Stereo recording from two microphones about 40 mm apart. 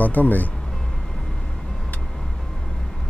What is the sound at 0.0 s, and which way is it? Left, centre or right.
Speech, left.